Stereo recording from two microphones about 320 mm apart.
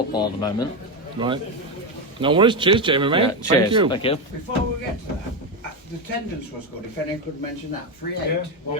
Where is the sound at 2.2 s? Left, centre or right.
Centre.